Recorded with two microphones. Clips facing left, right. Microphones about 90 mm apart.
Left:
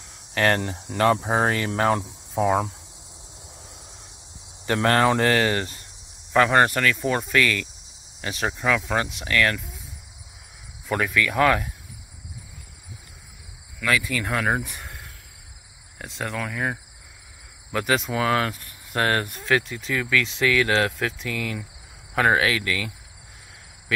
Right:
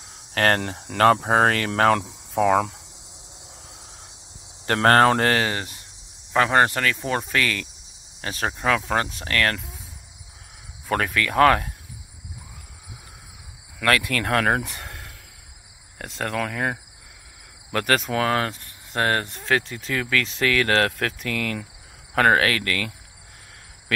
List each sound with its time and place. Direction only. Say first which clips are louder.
0.3 s speech: right 1 dB; 50° right (ahead or behind); by 2.7 s 90° right
4.6 s speech: right 3 dB; 55° right (ahead or behind)
5.4 s speech: left 3 dB; 20° right (ahead or behind); by 9.6 s 40° right (ahead or behind)
10.9 s speech: even; 50° right (ahead or behind)
13.7 s speech: right 2 dB; 70° right (ahead or behind)
17.7 s speech: right 1 dB; 60° right (ahead or behind)
18.0 s speech: even; 45° right (ahead or behind)